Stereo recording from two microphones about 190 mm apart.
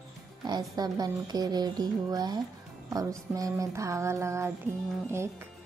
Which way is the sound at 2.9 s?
20° right (ahead or behind).